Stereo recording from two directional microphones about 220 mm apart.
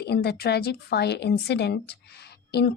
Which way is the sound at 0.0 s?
45° left (ahead or behind).